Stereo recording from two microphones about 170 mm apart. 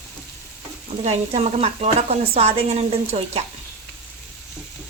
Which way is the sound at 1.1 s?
40° right (ahead or behind).